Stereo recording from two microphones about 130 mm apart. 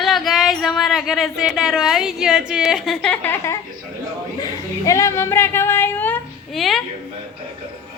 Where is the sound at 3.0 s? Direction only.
10° left (ahead or behind).